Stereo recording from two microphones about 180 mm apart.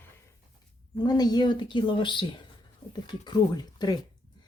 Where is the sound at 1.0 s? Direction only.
20° left (ahead or behind).